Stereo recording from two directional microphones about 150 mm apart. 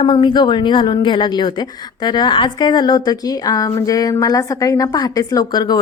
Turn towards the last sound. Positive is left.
turn(degrees=30)  # may be behind; listen again after turning